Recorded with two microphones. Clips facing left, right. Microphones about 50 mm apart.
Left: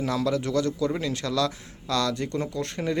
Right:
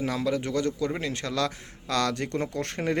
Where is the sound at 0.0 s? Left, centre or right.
Right.